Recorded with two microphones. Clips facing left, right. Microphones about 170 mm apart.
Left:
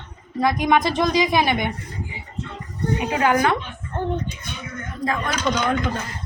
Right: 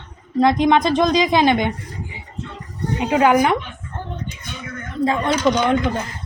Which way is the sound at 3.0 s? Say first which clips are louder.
Right 5 dB; 20° right (ahead or behind).